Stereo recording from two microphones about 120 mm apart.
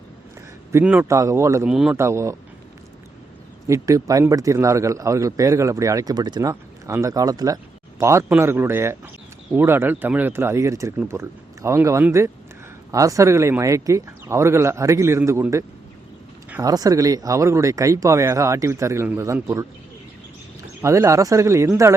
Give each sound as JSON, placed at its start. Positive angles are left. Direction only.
{"t": 1.0, "sound": "a man's voice", "side_deg": -25}
{"t": 1.6, "sound": "speech", "side_deg": -5}
{"t": 2.0, "sound": "a man's voice", "side_deg": -25}
{"t": 3.7, "sound": "a man's voice", "side_deg": -25}
{"t": 20.8, "sound": "a man's voice", "side_deg": -25}